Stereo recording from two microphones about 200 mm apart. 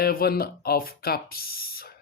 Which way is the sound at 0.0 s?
50° left (ahead or behind).